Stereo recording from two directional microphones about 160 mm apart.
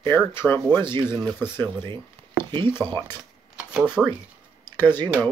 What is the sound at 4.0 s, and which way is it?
Speech, 5° right (ahead or behind).